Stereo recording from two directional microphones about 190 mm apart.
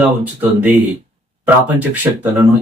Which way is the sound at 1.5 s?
10° right (ahead or behind).